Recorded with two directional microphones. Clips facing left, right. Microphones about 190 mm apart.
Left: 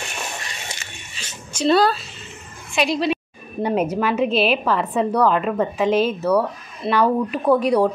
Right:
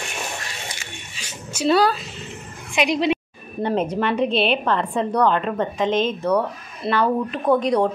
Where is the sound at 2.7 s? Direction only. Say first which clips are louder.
Right 1 dB; 20° right (ahead or behind).